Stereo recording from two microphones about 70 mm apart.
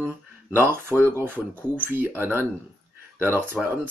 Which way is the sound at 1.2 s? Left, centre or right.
Right.